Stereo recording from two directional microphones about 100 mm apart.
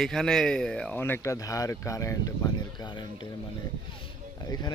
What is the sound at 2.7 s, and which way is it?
Speech, 45° left (ahead or behind).